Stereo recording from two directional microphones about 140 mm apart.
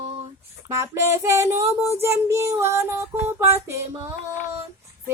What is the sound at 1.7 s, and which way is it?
Speech, 15° right (ahead or behind).